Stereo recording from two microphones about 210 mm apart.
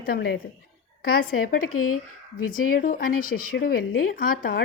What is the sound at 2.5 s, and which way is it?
A woman's voice, 40° left (ahead or behind).